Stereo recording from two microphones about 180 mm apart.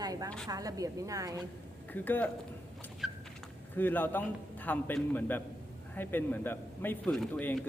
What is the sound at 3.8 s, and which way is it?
A man's voice, 10° left (ahead or behind).